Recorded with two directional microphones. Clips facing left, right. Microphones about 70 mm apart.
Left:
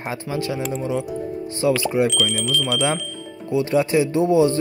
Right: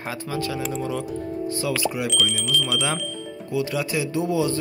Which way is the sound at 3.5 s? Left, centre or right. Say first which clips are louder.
Left 7 dB; left.